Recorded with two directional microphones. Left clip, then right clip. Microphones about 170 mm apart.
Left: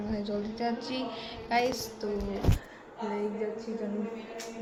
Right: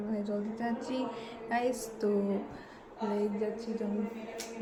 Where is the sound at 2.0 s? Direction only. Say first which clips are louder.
Right 4 dB; 60° right (ahead or behind).